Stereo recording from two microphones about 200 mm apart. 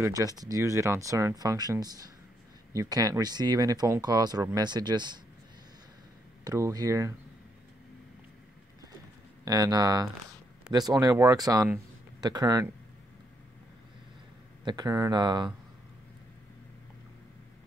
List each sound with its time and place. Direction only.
0.0 s speech: 15° right (ahead or behind)
6.4 s speech: 15° right (ahead or behind)
9.4 s speech: 15° right (ahead or behind)
14.6 s speech: 20° right (ahead or behind)